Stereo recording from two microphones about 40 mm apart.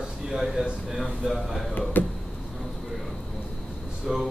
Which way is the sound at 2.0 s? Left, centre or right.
Left.